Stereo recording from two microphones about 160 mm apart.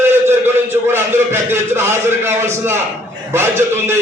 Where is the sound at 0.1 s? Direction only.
15° right (ahead or behind).